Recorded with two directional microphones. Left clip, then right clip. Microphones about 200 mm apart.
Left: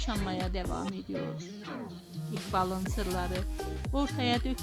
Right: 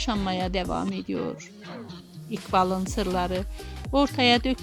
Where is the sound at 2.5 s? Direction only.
35° right (ahead or behind).